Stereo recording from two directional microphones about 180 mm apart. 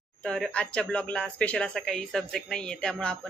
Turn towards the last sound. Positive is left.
turn(degrees=5)  # may be behind; listen again after turning